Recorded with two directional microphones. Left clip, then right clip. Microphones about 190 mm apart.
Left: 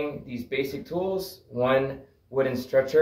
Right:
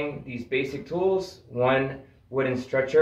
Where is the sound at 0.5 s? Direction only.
5° left (ahead or behind).